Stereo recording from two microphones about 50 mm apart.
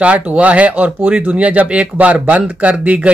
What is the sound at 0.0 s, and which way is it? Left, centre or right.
Speech, right.